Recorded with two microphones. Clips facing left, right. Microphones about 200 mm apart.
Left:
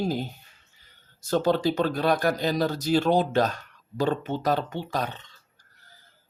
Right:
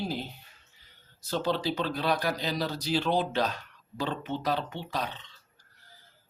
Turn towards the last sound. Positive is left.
turn(degrees=45)  # may be behind; listen again after turning